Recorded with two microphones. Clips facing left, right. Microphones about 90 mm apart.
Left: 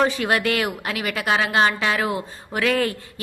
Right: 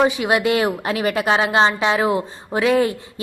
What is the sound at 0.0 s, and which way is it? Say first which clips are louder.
A woman's voice: right 3 dB; 15° right (ahead or behind).